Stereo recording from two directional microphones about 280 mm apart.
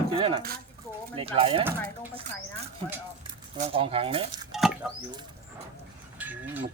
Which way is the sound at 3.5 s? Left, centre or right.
Right.